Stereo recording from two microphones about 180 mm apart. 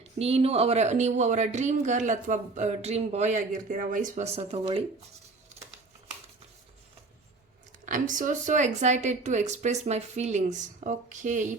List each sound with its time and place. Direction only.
0.0 s speech: 35° right (ahead or behind)
7.9 s speech: 45° right (ahead or behind)